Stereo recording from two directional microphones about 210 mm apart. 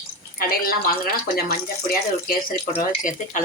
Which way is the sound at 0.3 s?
45° left (ahead or behind).